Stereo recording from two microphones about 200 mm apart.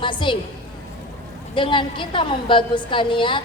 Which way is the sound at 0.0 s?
25° left (ahead or behind).